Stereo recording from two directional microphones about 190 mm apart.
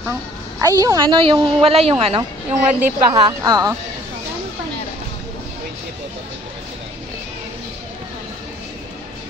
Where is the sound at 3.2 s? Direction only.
20° right (ahead or behind).